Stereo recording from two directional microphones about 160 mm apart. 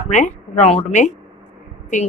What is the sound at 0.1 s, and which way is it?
A woman's voice, 50° left (ahead or behind).